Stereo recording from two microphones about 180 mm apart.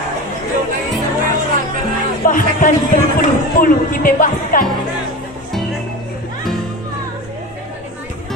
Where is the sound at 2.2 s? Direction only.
45° left (ahead or behind).